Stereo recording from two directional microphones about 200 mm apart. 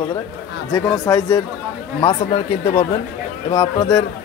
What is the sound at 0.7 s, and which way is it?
Speech, 15° left (ahead or behind).